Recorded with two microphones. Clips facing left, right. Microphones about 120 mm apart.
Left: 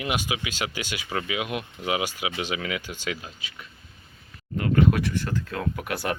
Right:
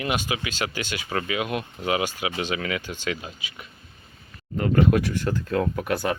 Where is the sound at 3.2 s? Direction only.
10° right (ahead or behind).